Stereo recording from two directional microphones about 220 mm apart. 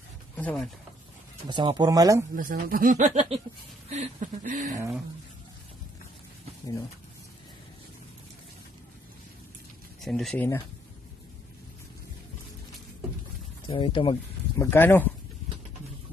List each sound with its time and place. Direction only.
0.4 s speech: 5° left (ahead or behind)
1.5 s speech: 20° right (ahead or behind)
2.3 s speech: 40° right (ahead or behind)
10.0 s speech: centre (ahead or behind)
13.7 s speech: 25° left (ahead or behind)
14.6 s speech: 10° left (ahead or behind)